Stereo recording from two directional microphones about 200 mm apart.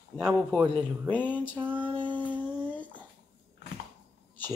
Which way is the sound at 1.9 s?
25° right (ahead or behind).